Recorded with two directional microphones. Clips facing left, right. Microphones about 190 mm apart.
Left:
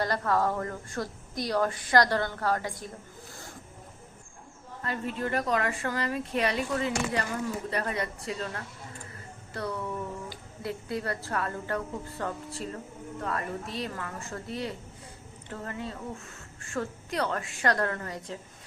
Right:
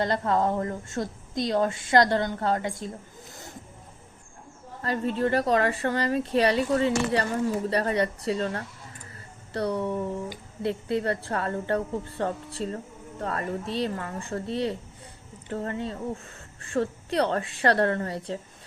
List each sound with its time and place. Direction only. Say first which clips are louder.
0.0 s a woman's voice: right 3 dB; 25° right (ahead or behind)
4.8 s a woman's voice: right 6 dB; 35° right (ahead or behind)